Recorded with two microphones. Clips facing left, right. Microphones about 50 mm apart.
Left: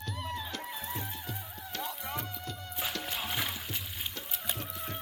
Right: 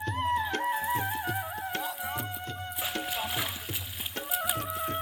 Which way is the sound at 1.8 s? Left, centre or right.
Centre.